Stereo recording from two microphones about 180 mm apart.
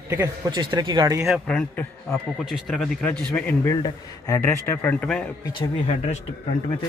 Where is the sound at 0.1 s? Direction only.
20° right (ahead or behind).